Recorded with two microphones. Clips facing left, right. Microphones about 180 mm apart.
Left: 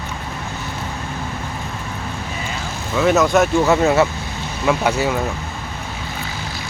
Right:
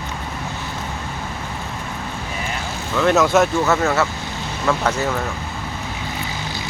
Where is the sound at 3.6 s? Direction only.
15° left (ahead or behind).